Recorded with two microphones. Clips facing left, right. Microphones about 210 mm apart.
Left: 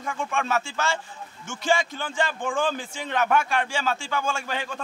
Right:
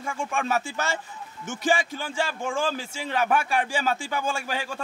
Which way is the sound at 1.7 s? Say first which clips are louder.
Left 1 dB; 10° right (ahead or behind).